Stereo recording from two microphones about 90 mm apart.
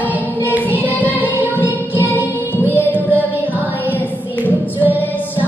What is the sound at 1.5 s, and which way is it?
Music, 20° left (ahead or behind).